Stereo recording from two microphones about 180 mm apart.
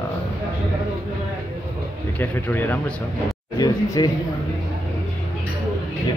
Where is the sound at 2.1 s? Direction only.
10° left (ahead or behind).